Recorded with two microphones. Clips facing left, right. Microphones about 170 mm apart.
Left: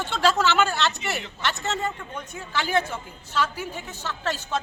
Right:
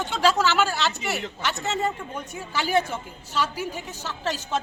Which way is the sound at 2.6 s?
40° right (ahead or behind).